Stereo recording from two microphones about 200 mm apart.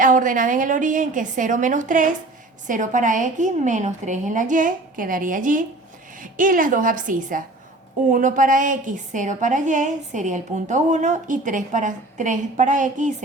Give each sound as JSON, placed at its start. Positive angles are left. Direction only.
{"t": 0.0, "sound": "a woman's voice", "side_deg": -40}